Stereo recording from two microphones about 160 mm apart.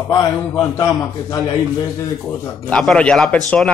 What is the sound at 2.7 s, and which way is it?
A man's voice, 5° left (ahead or behind).